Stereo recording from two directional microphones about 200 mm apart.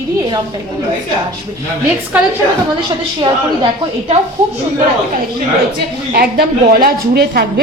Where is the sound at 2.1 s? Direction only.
10° right (ahead or behind).